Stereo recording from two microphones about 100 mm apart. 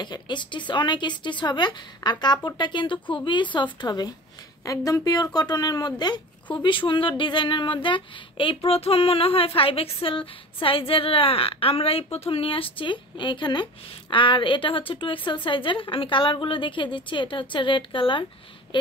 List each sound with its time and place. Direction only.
0.0 s speech: 50° left (ahead or behind)
6.5 s a woman's voice: 60° left (ahead or behind)